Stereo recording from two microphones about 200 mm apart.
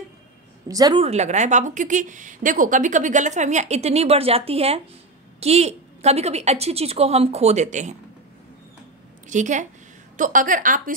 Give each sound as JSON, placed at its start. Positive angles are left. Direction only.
{"t": 0.7, "sound": "a woman's voice", "side_deg": -20}
{"t": 1.0, "sound": "a woman's voice", "side_deg": -35}
{"t": 9.3, "sound": "a woman's voice", "side_deg": -35}